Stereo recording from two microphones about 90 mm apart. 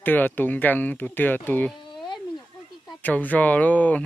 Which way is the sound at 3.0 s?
20° left (ahead or behind).